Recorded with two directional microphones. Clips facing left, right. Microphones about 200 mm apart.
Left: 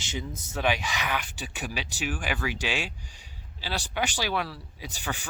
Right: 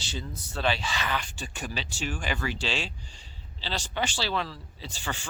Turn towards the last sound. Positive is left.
turn(degrees=15)  # may be behind; listen again after turning